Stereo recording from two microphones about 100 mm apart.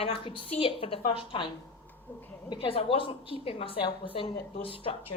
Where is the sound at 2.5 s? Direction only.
65° left (ahead or behind).